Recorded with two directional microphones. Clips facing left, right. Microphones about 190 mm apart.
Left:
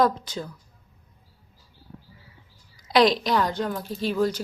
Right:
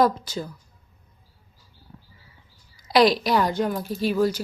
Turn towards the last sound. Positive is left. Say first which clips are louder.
# right 2 dB
turn(degrees=-5)  # may be behind; listen again after turning